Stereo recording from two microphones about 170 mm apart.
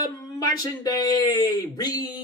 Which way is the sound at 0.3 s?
25° left (ahead or behind).